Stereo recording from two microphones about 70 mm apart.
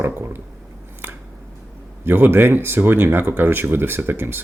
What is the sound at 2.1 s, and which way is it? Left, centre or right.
Speech, right.